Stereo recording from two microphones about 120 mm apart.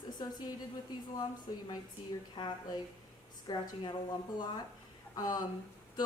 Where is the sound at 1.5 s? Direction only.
35° left (ahead or behind).